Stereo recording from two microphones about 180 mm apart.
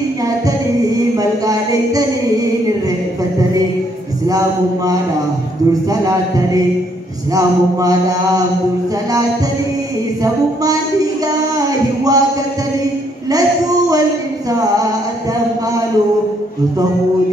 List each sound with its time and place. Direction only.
1.1 s speech: 20° right (ahead or behind)
4.3 s mantra: 20° right (ahead or behind)
10.2 s mantra: 20° right (ahead or behind)
11.5 s a sound: 20° right (ahead or behind)